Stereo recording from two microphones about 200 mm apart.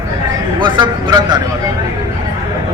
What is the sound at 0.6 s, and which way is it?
Speech, 20° right (ahead or behind).